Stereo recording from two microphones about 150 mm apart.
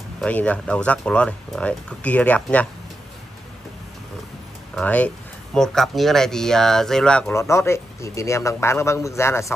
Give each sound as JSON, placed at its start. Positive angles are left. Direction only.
{"t": 0.2, "sound": "speech", "side_deg": 10}
{"t": 4.7, "sound": "speech", "side_deg": 10}
{"t": 7.3, "sound": "a man's voice", "side_deg": 20}